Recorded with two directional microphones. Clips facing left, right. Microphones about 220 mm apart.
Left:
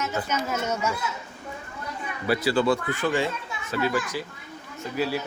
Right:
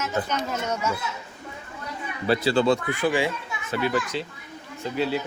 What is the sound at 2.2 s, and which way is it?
Speech, 25° right (ahead or behind).